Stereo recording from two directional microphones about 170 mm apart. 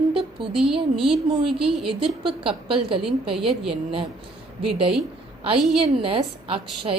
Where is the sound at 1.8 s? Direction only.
30° right (ahead or behind).